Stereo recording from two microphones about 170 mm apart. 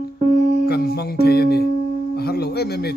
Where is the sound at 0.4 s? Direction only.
60° right (ahead or behind).